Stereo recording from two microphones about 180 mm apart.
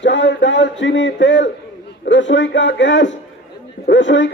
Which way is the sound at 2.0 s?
90° left.